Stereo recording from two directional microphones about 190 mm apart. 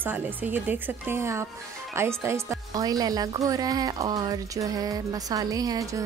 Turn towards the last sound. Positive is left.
turn(degrees=-15)  # may be behind; listen again after turning